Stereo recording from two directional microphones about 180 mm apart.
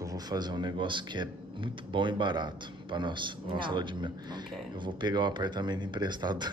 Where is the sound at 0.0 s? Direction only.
20° right (ahead or behind).